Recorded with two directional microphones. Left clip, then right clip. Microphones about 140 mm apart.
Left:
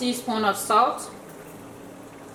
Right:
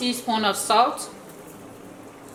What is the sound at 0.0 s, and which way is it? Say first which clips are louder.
Speech: right 1 dB; 20° right (ahead or behind).